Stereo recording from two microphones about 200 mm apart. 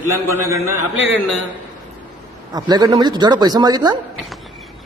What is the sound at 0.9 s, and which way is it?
Speech, 75° right (ahead or behind).